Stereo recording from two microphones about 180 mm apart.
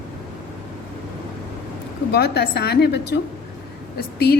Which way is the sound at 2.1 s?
65° left (ahead or behind).